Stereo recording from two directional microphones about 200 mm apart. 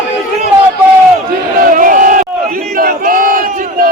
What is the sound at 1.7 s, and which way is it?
Crowd, 40° right (ahead or behind).